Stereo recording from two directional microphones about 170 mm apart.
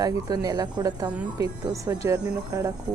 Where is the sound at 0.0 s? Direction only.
20° right (ahead or behind).